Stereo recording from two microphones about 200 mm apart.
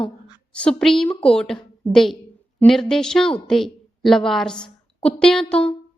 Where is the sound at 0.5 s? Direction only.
5° left (ahead or behind).